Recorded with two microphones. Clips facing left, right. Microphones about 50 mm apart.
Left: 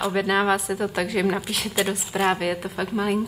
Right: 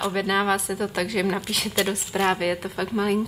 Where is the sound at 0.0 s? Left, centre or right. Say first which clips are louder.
Left 1 dB; centre.